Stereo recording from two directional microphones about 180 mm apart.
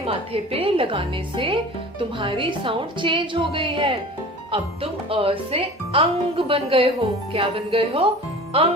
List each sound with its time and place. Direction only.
0.0 s a woman's voice: 30° right (ahead or behind)